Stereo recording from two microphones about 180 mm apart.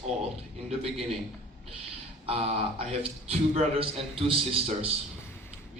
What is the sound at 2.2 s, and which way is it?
A man's voice, 35° right (ahead or behind).